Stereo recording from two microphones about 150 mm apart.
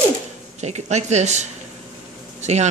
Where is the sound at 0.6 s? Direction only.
50° right (ahead or behind).